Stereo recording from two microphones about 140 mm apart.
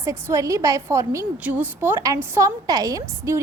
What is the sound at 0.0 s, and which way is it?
A woman's voice, 20° right (ahead or behind).